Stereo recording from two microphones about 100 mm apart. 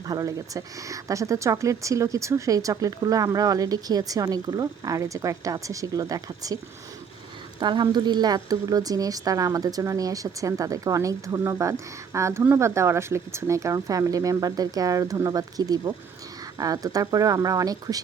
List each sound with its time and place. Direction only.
0.1 s speech: 35° right (ahead or behind)
7.6 s speech: 50° right (ahead or behind)